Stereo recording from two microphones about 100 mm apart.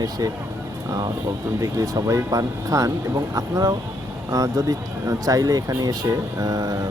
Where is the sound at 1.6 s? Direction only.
35° right (ahead or behind).